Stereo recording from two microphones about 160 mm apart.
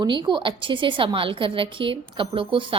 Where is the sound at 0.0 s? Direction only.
30° right (ahead or behind).